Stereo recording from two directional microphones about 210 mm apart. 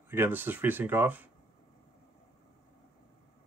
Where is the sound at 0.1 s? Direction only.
10° right (ahead or behind).